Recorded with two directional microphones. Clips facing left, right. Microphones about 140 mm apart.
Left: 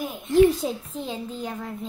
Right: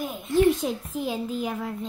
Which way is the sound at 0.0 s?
Centre (ahead or behind).